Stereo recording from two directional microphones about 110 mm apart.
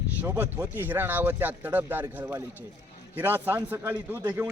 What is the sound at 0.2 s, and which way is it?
A man's voice, 15° right (ahead or behind).